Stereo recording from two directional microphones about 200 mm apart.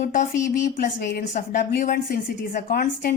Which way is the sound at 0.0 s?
40° left (ahead or behind).